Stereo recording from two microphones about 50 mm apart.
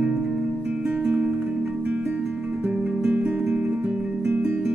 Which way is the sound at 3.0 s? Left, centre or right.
Right.